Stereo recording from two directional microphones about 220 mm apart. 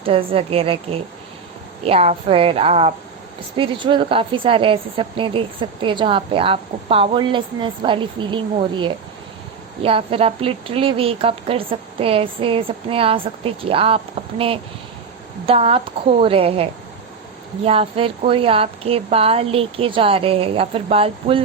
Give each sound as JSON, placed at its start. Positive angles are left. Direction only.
{"t": 0.0, "sound": "a woman's voice", "side_deg": -25}
{"t": 17.7, "sound": "a woman's voice", "side_deg": -25}